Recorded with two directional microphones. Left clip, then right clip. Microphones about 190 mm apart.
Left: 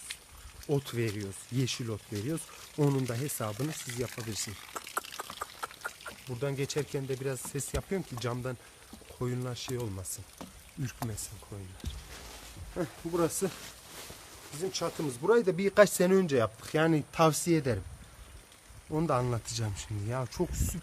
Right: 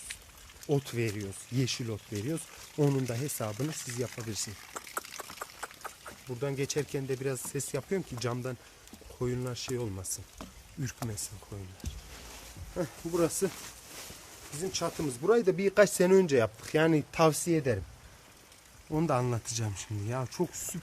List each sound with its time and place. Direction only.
0.7 s speech: centre (ahead or behind)
3.7 s speech: 15° left (ahead or behind)
4.4 s a sound: 5° left (ahead or behind)
6.4 s speech: centre (ahead or behind)
12.7 s speech: centre (ahead or behind)
14.6 s speech: 5° right (ahead or behind)
17.3 s speech: 10° left (ahead or behind)
18.9 s speech: 5° right (ahead or behind)